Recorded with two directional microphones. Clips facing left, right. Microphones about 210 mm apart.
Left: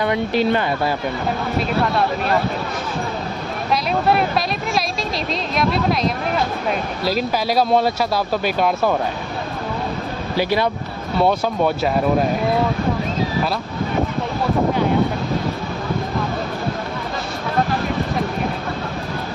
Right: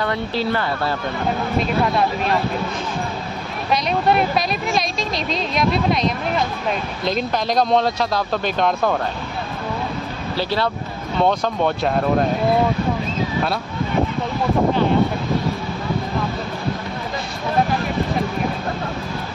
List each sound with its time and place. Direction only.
0.0 s speech: 15° left (ahead or behind)
4.7 s speech: centre (ahead or behind)
10.3 s speech: 15° left (ahead or behind)